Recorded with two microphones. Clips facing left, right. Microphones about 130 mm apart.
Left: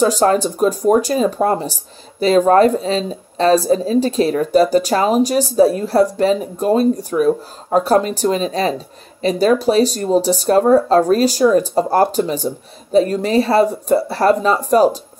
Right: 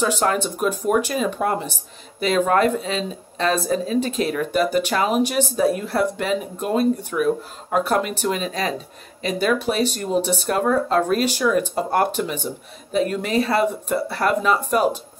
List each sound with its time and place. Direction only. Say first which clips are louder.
0.0 s speech: left 7 dB; 35° left (ahead or behind)